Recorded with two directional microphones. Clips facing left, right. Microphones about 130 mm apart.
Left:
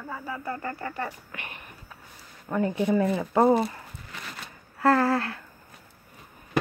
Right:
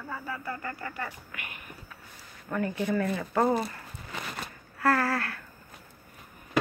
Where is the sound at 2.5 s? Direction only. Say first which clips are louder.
Left 4 dB; 20° left (ahead or behind).